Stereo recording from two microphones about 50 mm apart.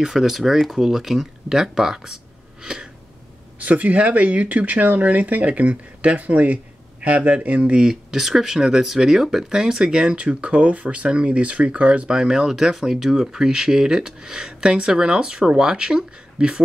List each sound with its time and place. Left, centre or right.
0.0 s speech: centre
2.6 s a sound: centre
3.5 s speech: right
12.1 s speech: centre